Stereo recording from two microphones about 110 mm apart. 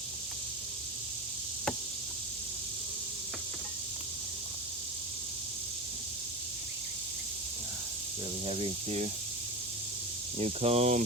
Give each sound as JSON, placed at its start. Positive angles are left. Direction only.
{"t": 8.4, "sound": "speech", "side_deg": -60}
{"t": 10.3, "sound": "speech", "side_deg": -70}